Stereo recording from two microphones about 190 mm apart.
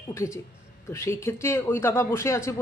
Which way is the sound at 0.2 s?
15° left (ahead or behind).